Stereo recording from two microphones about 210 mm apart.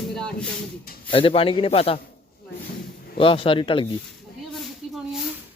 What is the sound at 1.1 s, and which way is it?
Speech, 25° left (ahead or behind).